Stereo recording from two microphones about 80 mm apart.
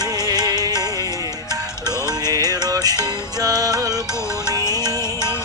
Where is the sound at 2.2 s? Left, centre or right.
Right.